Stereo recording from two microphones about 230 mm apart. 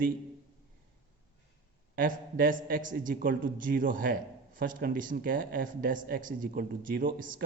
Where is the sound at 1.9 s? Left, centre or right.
Right.